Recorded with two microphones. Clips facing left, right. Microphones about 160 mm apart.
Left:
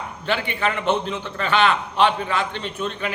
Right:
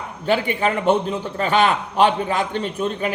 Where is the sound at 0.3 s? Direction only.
40° right (ahead or behind).